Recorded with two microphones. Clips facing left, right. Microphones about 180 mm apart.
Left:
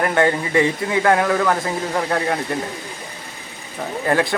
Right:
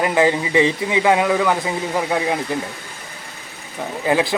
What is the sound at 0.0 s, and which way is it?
A man's voice, 5° right (ahead or behind).